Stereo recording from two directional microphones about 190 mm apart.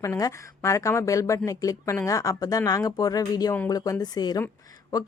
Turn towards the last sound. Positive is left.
turn(degrees=20)  # may be behind; listen again after turning